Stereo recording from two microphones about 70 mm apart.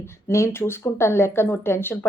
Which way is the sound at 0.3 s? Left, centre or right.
Left.